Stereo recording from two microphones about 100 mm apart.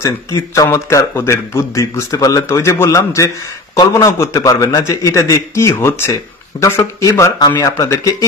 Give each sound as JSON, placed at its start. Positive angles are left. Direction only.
{"t": 0.0, "sound": "a man's voice", "side_deg": 30}